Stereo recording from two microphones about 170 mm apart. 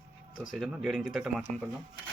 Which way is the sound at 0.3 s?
Centre (ahead or behind).